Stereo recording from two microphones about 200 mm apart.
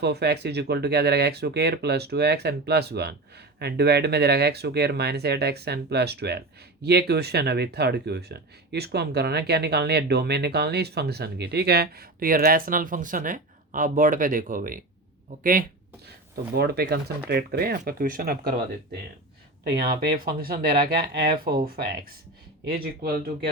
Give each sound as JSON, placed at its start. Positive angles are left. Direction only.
{"t": 0.0, "sound": "speech", "side_deg": -55}
{"t": 16.3, "sound": "speech", "side_deg": -50}
{"t": 19.6, "sound": "speech", "side_deg": -50}